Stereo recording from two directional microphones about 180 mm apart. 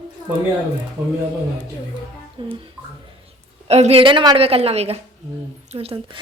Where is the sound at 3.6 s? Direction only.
35° right (ahead or behind).